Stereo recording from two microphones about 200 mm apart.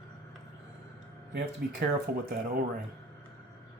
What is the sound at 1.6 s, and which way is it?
Speech, 50° right (ahead or behind).